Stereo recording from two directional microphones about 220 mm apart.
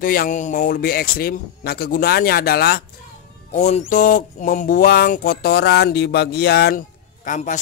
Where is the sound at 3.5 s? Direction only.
35° left (ahead or behind).